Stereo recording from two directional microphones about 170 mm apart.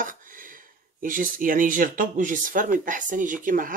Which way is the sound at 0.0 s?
50° right (ahead or behind).